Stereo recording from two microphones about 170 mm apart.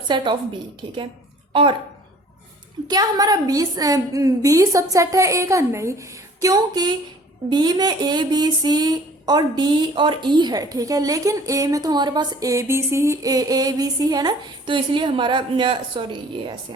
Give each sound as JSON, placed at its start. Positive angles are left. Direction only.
{"t": 0.1, "sound": "speech", "side_deg": -25}
{"t": 2.8, "sound": "speech", "side_deg": -20}